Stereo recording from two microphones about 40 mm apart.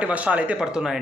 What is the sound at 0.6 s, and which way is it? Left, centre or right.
Speech, centre.